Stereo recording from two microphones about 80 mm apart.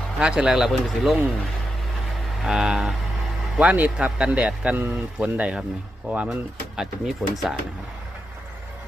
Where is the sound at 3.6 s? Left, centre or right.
Centre.